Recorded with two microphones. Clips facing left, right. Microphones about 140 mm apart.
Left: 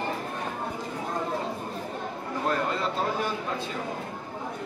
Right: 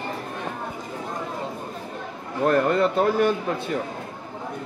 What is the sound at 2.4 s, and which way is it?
Speech, 55° right (ahead or behind).